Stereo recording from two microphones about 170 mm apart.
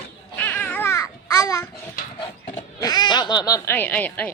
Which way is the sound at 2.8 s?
25° left (ahead or behind).